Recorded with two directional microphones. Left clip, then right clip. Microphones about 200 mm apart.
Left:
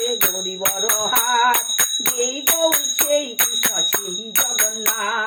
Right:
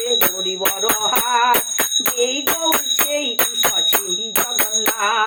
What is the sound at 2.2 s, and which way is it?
Music, 10° left (ahead or behind).